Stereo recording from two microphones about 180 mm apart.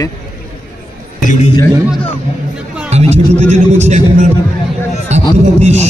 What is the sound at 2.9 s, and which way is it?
Music, 40° right (ahead or behind).